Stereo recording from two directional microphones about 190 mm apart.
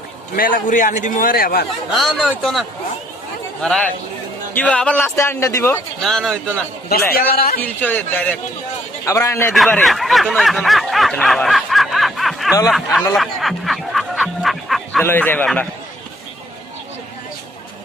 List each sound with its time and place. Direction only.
0.3 s a man's voice: 50° left (ahead or behind)
1.9 s a man's voice: centre (ahead or behind)
6.0 s a man's voice: centre (ahead or behind)
7.1 s a man's voice: 55° left (ahead or behind)
7.6 s a man's voice: 10° left (ahead or behind)
9.5 s a man's voice: 5° left (ahead or behind)
13.1 s music: centre (ahead or behind)
15.0 s a man's voice: 10° left (ahead or behind)